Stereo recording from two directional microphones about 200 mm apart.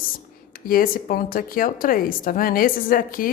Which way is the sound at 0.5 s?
45° left (ahead or behind).